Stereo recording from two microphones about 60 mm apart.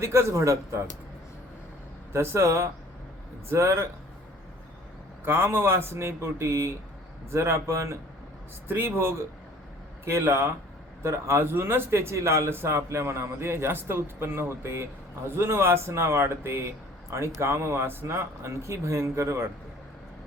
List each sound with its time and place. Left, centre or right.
0.0 s a man's voice: right
2.1 s a man's voice: right
5.2 s a man's voice: right
8.6 s a man's voice: right